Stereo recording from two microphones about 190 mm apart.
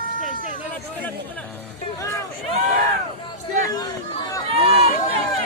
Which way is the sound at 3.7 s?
20° left (ahead or behind).